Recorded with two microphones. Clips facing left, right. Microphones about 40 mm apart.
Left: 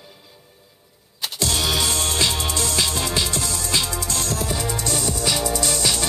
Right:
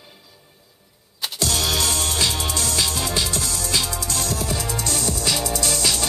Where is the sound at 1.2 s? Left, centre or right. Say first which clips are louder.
Even; centre.